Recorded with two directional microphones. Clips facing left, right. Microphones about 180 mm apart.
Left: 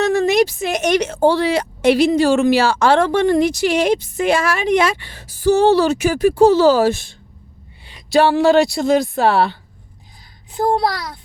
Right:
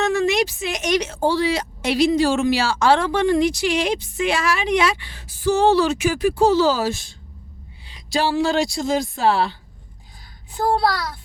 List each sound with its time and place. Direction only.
0.0 s a sound: 40° left (ahead or behind)
0.7 s a woman's voice: 55° left (ahead or behind)
6.5 s speech: 55° left (ahead or behind)
10.5 s a child's voice: 20° left (ahead or behind)